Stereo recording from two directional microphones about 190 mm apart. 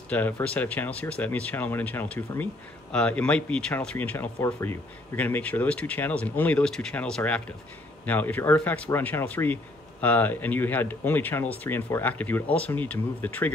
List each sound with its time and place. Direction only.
0.1 s speech: 10° left (ahead or behind)